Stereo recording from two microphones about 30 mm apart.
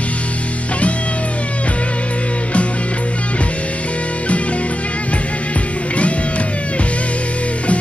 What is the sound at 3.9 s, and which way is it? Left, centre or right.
Music, left.